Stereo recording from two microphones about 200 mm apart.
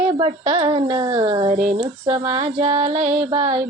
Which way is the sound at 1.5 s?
40° right (ahead or behind).